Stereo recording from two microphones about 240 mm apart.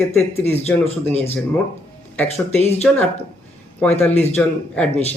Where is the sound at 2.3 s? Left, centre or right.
Left.